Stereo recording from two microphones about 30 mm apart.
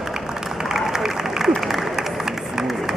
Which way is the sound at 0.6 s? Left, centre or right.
Centre.